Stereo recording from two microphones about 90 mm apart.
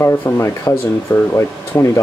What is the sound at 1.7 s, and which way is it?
Speech, 35° left (ahead or behind).